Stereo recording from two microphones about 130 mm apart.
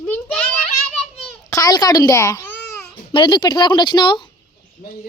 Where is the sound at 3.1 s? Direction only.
40° left (ahead or behind).